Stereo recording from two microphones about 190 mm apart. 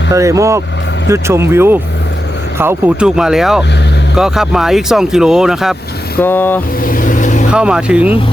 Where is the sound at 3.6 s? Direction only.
65° left (ahead or behind).